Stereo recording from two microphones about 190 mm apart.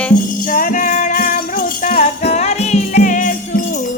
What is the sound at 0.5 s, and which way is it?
Music, 45° left (ahead or behind).